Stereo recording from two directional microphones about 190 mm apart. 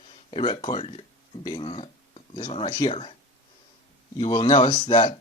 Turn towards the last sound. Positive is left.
turn(degrees=25)  # may be behind; listen again after turning